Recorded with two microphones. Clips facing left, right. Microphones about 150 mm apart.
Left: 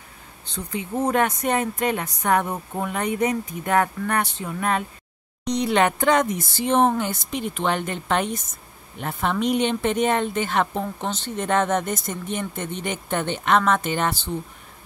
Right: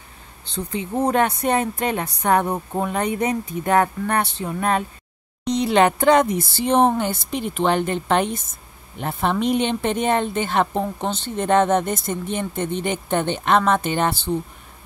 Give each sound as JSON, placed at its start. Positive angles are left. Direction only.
{"t": 0.5, "sound": "a woman's voice", "side_deg": -30}